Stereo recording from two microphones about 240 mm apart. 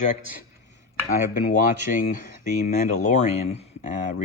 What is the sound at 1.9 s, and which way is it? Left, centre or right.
Speech, left.